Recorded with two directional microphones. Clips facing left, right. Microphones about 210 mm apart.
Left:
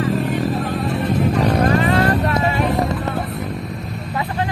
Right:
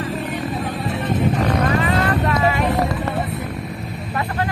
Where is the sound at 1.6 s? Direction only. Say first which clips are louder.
Left 3 dB; 30° left (ahead or behind).